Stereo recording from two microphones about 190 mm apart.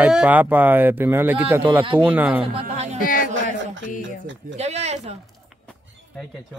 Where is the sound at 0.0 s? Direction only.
5° right (ahead or behind).